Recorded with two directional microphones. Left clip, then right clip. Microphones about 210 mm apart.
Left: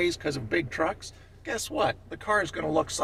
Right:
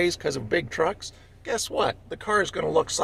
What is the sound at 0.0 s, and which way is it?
Speech, 50° right (ahead or behind).